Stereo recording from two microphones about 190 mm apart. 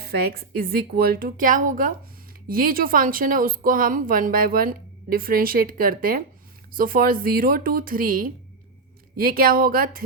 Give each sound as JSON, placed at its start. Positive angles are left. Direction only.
{"t": 0.0, "sound": "a woman's voice", "side_deg": -55}